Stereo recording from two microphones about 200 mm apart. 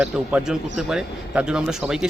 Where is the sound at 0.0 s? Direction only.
5° right (ahead or behind).